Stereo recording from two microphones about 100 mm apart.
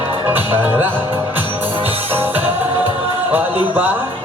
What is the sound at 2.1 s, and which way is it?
Music, 20° right (ahead or behind).